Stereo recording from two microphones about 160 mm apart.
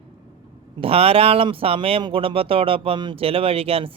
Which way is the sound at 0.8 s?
35° right (ahead or behind).